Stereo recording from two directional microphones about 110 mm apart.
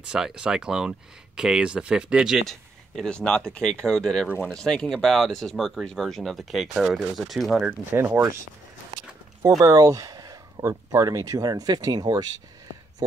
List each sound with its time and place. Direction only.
0.0 s speech: 10° right (ahead or behind)
3.0 s speech: 5° left (ahead or behind)
4.3 s speech: 20° left (ahead or behind)
4.6 s speech: 5° left (ahead or behind)
7.6 s speech: 20° right (ahead or behind)
9.6 s speech: 35° right (ahead or behind)